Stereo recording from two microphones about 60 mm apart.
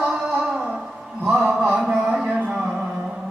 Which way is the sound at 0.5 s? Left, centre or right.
Centre.